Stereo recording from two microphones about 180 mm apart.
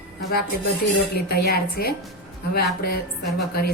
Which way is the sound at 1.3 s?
60° left (ahead or behind).